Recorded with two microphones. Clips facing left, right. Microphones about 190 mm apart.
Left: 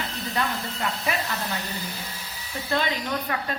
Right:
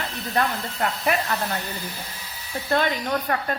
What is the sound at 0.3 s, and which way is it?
Speech, 50° right (ahead or behind).